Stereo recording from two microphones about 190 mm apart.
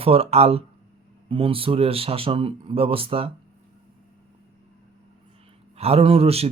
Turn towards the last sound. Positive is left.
turn(degrees=-30)  # may be behind; listen again after turning